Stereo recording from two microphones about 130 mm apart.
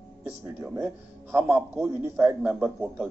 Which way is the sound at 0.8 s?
5° right (ahead or behind).